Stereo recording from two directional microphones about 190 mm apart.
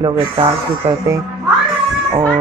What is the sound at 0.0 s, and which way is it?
Speech, 25° right (ahead or behind).